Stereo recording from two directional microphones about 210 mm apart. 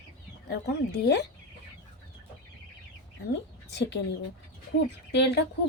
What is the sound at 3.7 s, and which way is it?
Speech, 55° left (ahead or behind).